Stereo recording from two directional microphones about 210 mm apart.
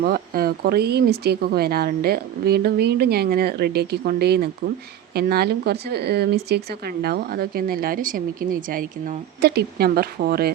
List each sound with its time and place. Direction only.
0.0 s speech: 45° right (ahead or behind)